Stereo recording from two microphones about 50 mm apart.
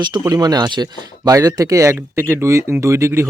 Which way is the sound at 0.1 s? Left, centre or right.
Right.